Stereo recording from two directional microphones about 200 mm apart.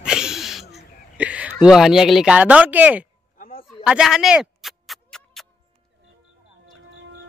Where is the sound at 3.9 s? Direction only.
5° right (ahead or behind).